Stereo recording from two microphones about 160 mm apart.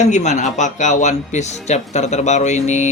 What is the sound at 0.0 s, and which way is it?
Speech, 45° left (ahead or behind).